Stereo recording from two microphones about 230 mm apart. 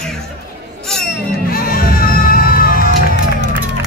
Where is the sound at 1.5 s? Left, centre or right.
Left.